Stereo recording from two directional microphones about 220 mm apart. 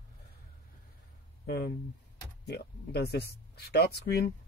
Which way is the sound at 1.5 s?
50° left (ahead or behind).